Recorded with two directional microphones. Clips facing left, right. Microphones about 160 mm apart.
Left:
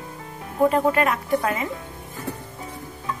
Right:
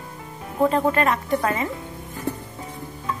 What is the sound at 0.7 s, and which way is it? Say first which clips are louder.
Speech: even; 10° left (ahead or behind).